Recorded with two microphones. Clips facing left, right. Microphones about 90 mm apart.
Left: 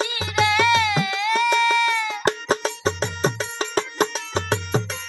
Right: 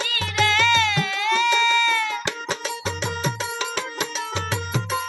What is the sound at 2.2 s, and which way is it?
Music, 40° left (ahead or behind).